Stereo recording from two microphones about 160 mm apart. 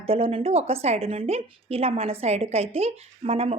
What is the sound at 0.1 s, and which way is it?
A woman's voice, 35° right (ahead or behind).